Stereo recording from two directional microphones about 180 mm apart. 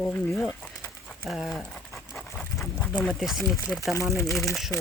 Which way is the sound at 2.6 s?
10° left (ahead or behind).